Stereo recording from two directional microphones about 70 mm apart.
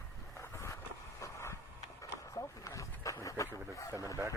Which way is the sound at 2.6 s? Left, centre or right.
Left.